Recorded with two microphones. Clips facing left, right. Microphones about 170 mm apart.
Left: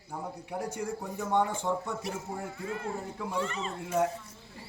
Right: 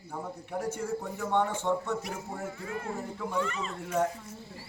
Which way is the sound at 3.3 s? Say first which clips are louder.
Right 1 dB; 30° left (ahead or behind).